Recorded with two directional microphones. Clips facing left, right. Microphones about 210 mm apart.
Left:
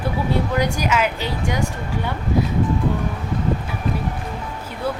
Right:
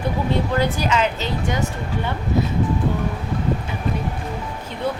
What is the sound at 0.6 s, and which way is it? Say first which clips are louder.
Speech: even; 10° left (ahead or behind).